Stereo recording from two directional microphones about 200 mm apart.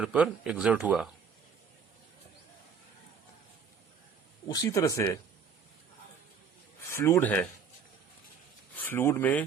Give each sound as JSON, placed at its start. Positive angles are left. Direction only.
{"t": 0.0, "sound": "speech", "side_deg": -5}
{"t": 4.4, "sound": "speech", "side_deg": 15}
{"t": 6.8, "sound": "speech", "side_deg": 15}
{"t": 8.7, "sound": "speech", "side_deg": 10}